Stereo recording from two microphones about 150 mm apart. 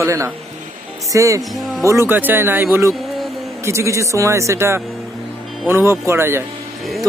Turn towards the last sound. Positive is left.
turn(degrees=-15)  # may be behind; listen again after turning